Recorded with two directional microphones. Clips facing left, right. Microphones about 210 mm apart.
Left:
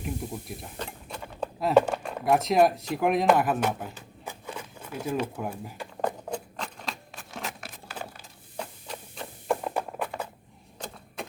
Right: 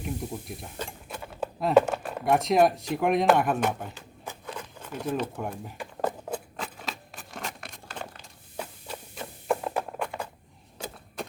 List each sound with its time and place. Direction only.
0.0 s cutlery: centre (ahead or behind)
8.5 s a sound: 5° right (ahead or behind)
10.8 s vehicle: 5° right (ahead or behind)